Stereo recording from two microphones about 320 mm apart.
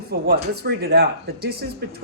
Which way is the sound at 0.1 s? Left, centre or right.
Right.